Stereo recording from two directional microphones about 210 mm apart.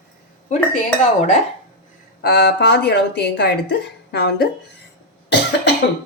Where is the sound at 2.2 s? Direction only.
50° left (ahead or behind).